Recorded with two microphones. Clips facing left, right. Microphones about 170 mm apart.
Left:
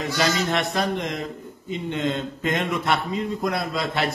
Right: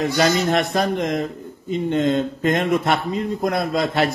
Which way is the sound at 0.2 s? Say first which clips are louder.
Right 4 dB; 45° right (ahead or behind).